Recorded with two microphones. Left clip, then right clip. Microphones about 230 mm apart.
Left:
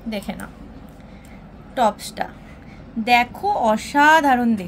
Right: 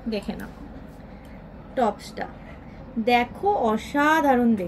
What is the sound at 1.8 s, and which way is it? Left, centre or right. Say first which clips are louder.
A woman's voice: left 5 dB; left.